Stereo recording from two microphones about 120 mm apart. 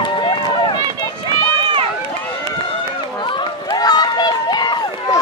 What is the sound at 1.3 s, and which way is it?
Run, 45° right (ahead or behind).